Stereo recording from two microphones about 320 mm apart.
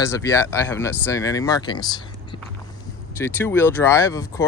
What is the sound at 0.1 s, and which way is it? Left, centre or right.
Speech, centre.